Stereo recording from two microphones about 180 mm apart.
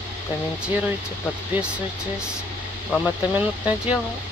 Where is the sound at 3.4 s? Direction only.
10° right (ahead or behind).